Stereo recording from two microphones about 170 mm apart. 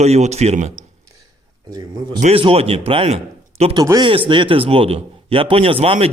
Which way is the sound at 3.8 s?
20° right (ahead or behind).